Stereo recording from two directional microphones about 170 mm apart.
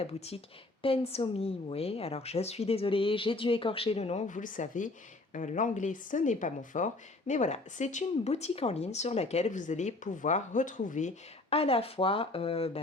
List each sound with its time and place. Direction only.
0.0 s a woman's voice: 35° left (ahead or behind)
11.5 s a woman's voice: 35° left (ahead or behind)